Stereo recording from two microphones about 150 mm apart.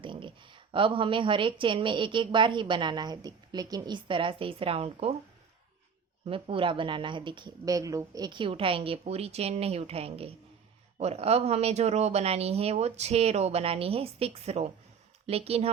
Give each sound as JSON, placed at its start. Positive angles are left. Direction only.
{"t": 0.0, "sound": "speech", "side_deg": -35}
{"t": 6.2, "sound": "speech", "side_deg": -35}